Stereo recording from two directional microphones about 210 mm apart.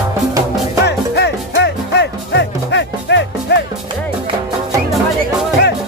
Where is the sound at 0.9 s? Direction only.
55° left (ahead or behind).